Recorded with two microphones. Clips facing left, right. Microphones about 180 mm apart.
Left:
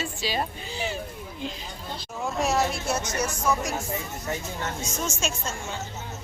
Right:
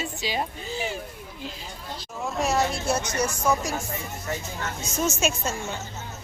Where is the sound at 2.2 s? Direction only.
Centre (ahead or behind).